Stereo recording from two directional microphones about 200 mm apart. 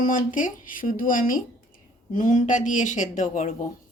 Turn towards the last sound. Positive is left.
turn(degrees=40)  # may be behind; listen again after turning